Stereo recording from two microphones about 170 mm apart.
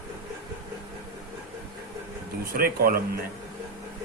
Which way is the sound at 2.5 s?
60° right (ahead or behind).